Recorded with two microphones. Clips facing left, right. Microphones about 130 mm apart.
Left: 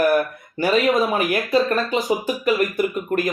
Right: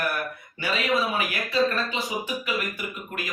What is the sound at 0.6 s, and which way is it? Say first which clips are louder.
Speech: left 8 dB; 50° left (ahead or behind).